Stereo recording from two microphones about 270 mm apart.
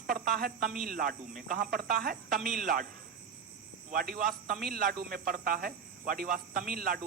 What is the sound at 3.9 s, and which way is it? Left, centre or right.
Speech, right.